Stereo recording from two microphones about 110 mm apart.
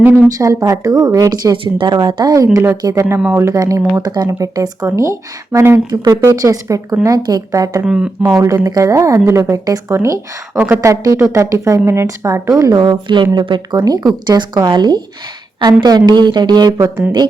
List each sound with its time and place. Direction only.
0.3 s a woman's voice: 35° right (ahead or behind)
7.9 s speech: 10° right (ahead or behind)
8.2 s a woman's voice: 30° right (ahead or behind)
12.7 s speech: 45° right (ahead or behind)